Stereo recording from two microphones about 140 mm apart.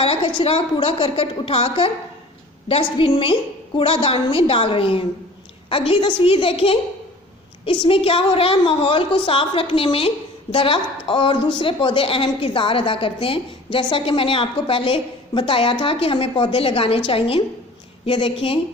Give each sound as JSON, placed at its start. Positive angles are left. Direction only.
{"t": 0.0, "sound": "a woman's voice", "side_deg": 40}